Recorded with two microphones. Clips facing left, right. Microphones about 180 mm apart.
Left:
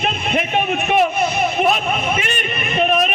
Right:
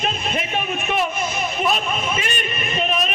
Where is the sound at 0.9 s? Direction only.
60° left (ahead or behind).